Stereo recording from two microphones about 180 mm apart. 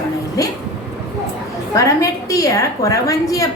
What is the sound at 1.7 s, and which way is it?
A woman's voice, 20° left (ahead or behind).